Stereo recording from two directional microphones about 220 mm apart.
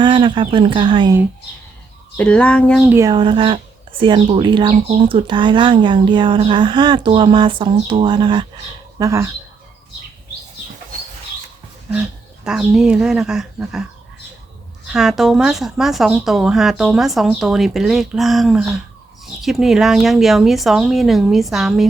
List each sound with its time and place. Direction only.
0.0 s speech: 20° right (ahead or behind)
2.1 s speech: 5° left (ahead or behind)
2.9 s speech: 15° right (ahead or behind)
12.5 s speech: 5° right (ahead or behind)
14.9 s speech: centre (ahead or behind)